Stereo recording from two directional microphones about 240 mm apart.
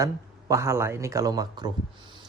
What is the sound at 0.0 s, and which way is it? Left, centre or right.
Speech, centre.